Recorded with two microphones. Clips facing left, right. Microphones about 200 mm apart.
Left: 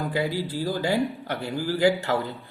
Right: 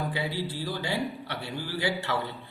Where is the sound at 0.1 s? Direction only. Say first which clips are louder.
Left 5 dB; 45° left (ahead or behind).